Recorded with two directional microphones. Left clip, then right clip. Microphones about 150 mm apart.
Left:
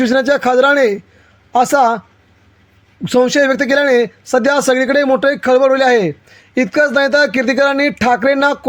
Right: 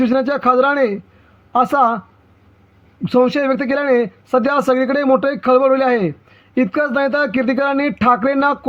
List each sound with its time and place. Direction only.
0.0 s speech: 50° left (ahead or behind)
3.0 s speech: 50° left (ahead or behind)